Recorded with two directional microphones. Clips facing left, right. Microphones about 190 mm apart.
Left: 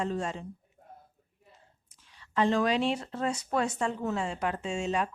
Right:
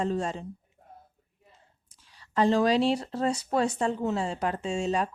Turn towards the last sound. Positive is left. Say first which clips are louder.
# right 3 dB
turn(degrees=-35)  # may be behind; listen again after turning